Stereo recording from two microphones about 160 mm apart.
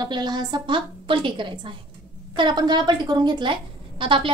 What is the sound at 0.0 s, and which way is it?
A woman's voice, 25° right (ahead or behind).